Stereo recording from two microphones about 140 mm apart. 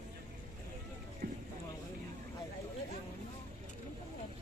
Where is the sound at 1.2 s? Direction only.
90° right.